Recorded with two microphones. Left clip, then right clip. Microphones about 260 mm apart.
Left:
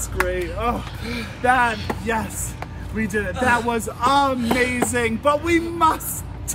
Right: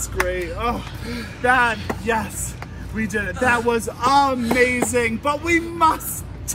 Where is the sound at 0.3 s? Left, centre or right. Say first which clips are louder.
Even; centre.